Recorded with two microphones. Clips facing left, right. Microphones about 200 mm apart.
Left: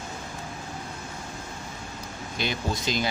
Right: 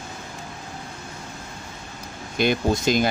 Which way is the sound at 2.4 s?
50° right (ahead or behind).